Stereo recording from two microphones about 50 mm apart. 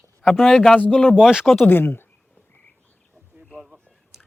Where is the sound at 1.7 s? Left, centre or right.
Left.